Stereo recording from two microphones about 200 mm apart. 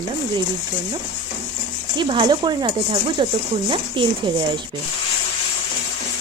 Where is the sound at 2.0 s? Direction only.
25° right (ahead or behind).